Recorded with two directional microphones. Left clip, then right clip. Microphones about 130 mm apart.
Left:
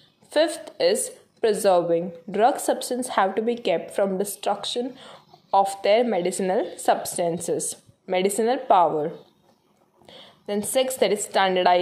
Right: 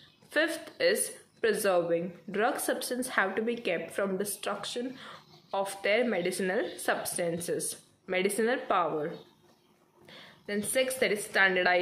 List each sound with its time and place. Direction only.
0.3 s a woman's voice: 30° left (ahead or behind)